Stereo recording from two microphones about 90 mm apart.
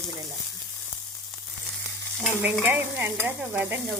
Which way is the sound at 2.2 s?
20° right (ahead or behind).